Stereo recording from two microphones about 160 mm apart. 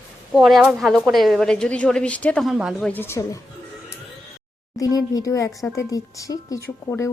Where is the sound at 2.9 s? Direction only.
15° left (ahead or behind).